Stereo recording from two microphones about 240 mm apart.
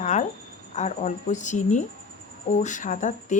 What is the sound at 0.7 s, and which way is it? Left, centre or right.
Speech, left.